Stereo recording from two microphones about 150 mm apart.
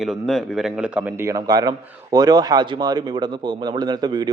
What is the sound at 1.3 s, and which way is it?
Speech, 25° right (ahead or behind).